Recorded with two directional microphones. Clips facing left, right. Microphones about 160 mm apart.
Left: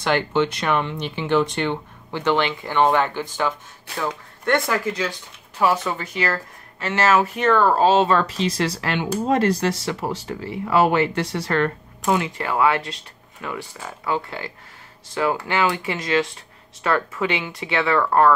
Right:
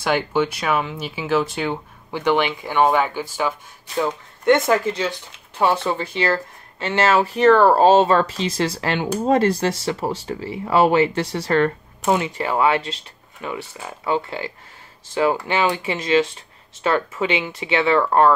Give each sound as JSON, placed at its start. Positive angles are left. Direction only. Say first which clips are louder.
{"t": 0.0, "sound": "speech", "louder": "even", "side_deg": -10}
{"t": 4.0, "sound": "speech", "louder": "right 4 dB", "side_deg": -20}
{"t": 8.4, "sound": "speech", "louder": "even", "side_deg": -25}